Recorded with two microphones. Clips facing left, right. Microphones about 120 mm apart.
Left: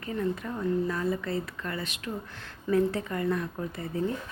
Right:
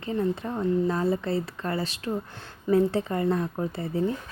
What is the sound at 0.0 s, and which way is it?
A woman's voice, 25° right (ahead or behind).